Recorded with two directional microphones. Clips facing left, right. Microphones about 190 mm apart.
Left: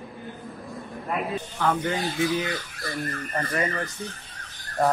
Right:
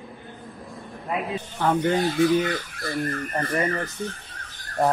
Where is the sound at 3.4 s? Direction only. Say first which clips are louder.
Right 2 dB; 25° right (ahead or behind).